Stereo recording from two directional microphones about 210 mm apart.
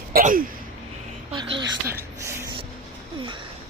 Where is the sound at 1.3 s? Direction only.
20° right (ahead or behind).